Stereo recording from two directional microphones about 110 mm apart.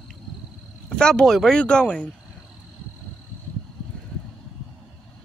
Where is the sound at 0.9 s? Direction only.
10° left (ahead or behind).